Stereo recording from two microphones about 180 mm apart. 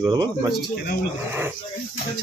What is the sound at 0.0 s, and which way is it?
Speech, 20° right (ahead or behind).